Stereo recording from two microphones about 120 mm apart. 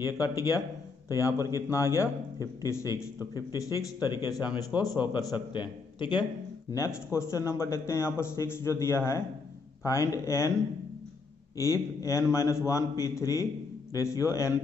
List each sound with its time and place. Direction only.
0.0 s a man's voice: 30° left (ahead or behind)
6.7 s a man's voice: 25° left (ahead or behind)
11.5 s a man's voice: 25° left (ahead or behind)